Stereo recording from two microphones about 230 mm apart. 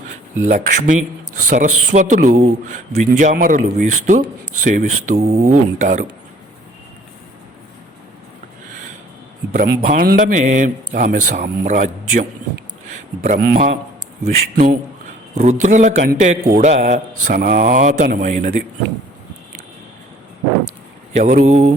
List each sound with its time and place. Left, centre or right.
0.4 s speech: right
9.5 s speech: right
15.4 s speech: right
21.2 s speech: right